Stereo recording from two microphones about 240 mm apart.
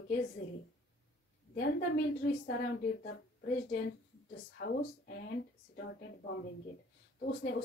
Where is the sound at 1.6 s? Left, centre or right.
Left.